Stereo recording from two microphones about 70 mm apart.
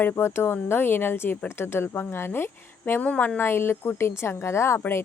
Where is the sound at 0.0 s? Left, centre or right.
Left.